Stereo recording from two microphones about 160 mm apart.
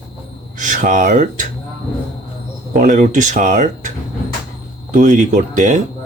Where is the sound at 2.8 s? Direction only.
55° right (ahead or behind).